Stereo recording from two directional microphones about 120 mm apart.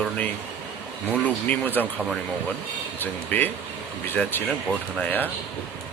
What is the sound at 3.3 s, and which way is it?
Speech, 15° left (ahead or behind).